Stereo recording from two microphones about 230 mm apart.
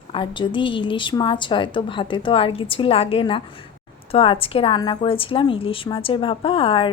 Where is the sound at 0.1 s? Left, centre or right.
Left.